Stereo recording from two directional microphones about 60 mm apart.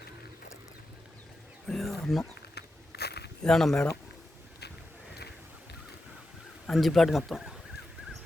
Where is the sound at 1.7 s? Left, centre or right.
Centre.